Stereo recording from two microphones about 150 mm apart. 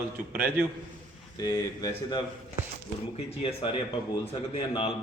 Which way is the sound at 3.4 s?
40° left (ahead or behind).